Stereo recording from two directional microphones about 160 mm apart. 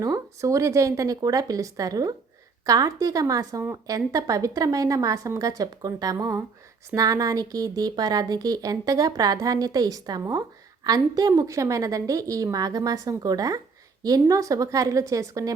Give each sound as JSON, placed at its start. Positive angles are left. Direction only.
{"t": 0.0, "sound": "a woman's voice", "side_deg": -20}